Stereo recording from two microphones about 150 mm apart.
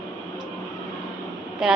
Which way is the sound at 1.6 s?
5° right (ahead or behind).